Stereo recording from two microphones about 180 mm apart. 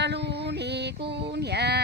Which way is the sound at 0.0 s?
70° right (ahead or behind).